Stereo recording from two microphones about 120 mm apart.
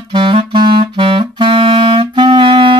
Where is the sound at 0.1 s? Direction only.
45° right (ahead or behind).